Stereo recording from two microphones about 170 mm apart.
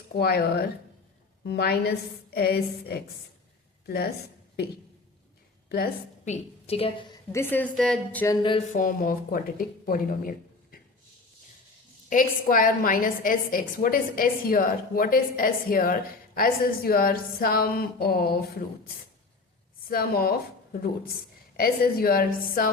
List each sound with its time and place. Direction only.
0.2 s a woman's voice: 70° left (ahead or behind)
1.5 s a woman's voice: 70° left (ahead or behind)
5.6 s a woman's voice: 65° left (ahead or behind)
6.2 s a woman's voice: 40° left (ahead or behind)
7.3 s a woman's voice: 10° left (ahead or behind)
8.7 s a woman's voice: 55° left (ahead or behind)
12.0 s a woman's voice: 55° left (ahead or behind)
19.9 s a woman's voice: 60° left (ahead or behind)
21.5 s a woman's voice: 60° left (ahead or behind)